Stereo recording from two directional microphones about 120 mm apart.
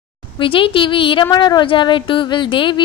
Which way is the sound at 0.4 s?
45° left (ahead or behind).